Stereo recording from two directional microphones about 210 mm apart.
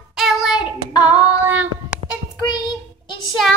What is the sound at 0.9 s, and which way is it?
Female singing, 20° left (ahead or behind).